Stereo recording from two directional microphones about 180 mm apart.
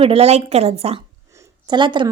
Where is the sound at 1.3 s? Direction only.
20° right (ahead or behind).